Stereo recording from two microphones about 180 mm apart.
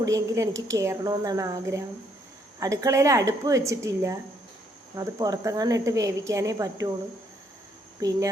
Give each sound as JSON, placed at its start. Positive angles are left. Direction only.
{"t": 0.0, "sound": "a woman's voice", "side_deg": -20}
{"t": 8.0, "sound": "speech", "side_deg": -20}